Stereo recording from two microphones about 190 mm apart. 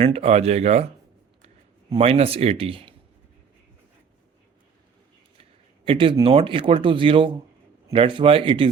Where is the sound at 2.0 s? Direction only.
30° right (ahead or behind).